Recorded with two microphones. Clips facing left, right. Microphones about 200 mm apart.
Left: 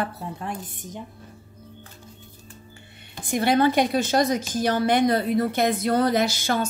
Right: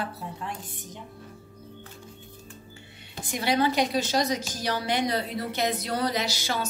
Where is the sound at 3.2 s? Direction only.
55° left (ahead or behind).